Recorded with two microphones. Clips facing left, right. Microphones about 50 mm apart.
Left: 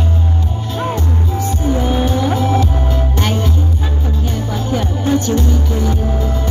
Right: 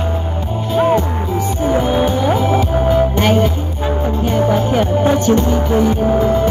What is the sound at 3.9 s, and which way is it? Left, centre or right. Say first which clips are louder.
Music: right 5 dB; right.